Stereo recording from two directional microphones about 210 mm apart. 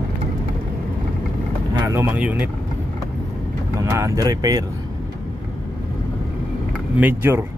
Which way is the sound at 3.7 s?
15° right (ahead or behind).